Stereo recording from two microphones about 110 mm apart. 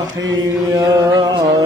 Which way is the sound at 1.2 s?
35° right (ahead or behind).